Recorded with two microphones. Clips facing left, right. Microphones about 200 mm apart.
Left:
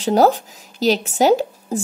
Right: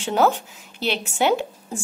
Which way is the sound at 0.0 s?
40° left (ahead or behind).